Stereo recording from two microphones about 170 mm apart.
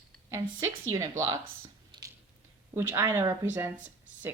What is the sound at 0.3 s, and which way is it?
Speech, 20° right (ahead or behind).